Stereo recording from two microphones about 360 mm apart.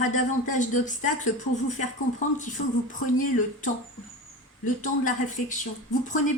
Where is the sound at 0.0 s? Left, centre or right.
Left.